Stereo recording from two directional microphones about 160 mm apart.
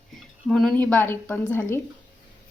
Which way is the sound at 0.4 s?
Centre (ahead or behind).